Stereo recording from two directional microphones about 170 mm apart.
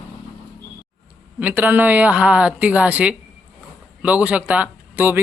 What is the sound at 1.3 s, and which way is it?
A man's voice, 10° right (ahead or behind).